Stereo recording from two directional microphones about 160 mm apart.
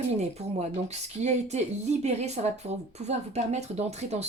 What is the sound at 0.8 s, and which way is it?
Speech, 45° right (ahead or behind).